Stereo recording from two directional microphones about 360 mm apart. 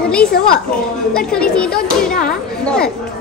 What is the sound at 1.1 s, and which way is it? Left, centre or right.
A child's voice, centre.